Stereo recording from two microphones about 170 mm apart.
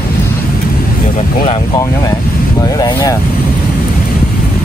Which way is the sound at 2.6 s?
25° left (ahead or behind).